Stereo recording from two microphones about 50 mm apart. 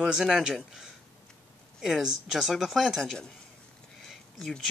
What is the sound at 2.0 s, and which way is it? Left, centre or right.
Speech, centre.